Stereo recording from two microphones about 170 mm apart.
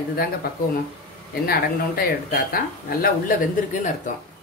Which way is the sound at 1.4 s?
65° left (ahead or behind).